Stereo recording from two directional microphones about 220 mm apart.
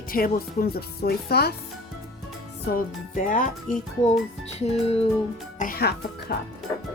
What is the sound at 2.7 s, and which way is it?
Speech, 40° left (ahead or behind).